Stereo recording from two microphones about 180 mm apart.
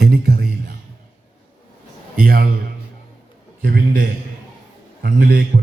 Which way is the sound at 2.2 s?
55° right (ahead or behind).